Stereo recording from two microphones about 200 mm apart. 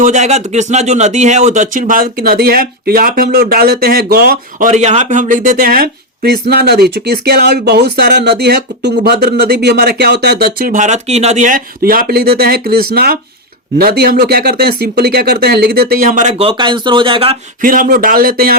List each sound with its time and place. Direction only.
0.0 s speech: 35° right (ahead or behind)
17.6 s speech: 45° right (ahead or behind)